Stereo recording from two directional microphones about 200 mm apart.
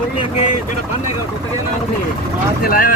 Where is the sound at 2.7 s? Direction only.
45° left (ahead or behind).